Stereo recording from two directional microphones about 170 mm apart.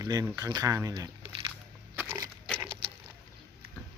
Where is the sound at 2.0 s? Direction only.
15° right (ahead or behind).